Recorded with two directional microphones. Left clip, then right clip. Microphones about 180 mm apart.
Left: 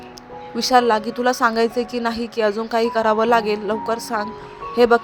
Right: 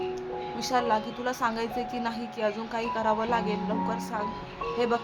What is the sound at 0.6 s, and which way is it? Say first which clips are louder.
A woman's voice: left 11 dB; 40° left (ahead or behind).